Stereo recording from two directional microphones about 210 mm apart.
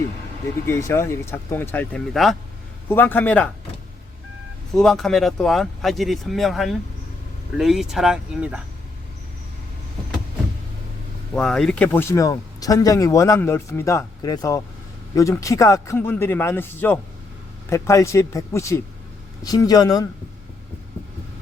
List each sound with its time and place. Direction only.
0.7 s speech: 15° left (ahead or behind)
4.7 s speech: centre (ahead or behind)
11.3 s speech: 5° left (ahead or behind)